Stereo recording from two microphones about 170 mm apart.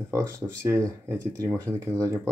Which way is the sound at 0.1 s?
20° right (ahead or behind).